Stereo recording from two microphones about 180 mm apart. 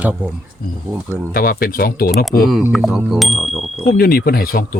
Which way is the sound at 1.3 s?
55° left (ahead or behind).